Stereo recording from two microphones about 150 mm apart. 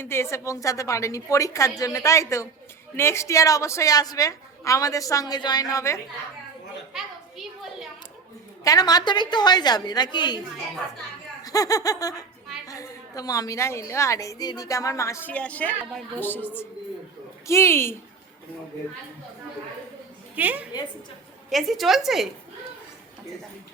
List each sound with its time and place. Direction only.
0.0 s a woman's voice: 15° left (ahead or behind)
6.9 s a sound: centre (ahead or behind)
8.6 s a woman's voice: 25° left (ahead or behind)
11.4 s a woman's voice: 25° left (ahead or behind)
20.3 s a woman's voice: 10° right (ahead or behind)
21.5 s a woman's voice: centre (ahead or behind)